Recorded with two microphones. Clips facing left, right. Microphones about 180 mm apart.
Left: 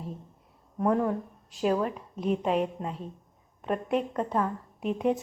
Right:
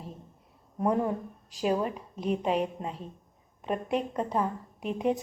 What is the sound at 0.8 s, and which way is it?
Speech, 15° right (ahead or behind).